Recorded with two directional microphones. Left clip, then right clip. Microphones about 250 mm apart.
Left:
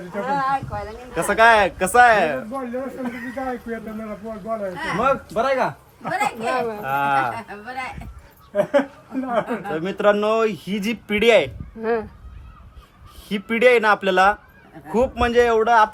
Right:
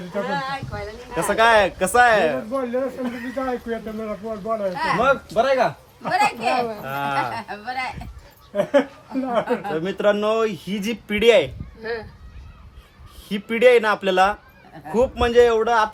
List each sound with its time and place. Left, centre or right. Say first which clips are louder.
0.3 s speech: left 8 dB; left
1.1 s speech: left 1 dB; centre
11.8 s speech: left 6 dB; left
13.2 s speech: right 1 dB; centre